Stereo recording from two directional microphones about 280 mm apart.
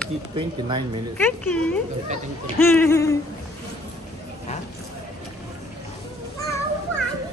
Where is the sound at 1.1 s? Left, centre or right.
Centre.